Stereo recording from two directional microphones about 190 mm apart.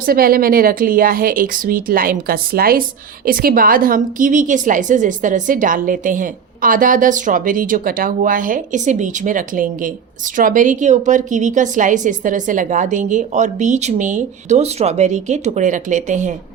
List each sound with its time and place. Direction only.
0.0 s a woman's voice: 50° right (ahead or behind)